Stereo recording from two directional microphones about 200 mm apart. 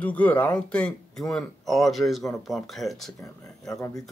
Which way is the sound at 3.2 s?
15° left (ahead or behind).